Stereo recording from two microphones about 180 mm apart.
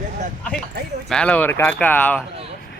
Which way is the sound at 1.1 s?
5° left (ahead or behind).